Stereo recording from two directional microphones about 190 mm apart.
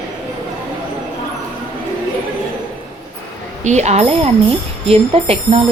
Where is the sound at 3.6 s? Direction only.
35° right (ahead or behind).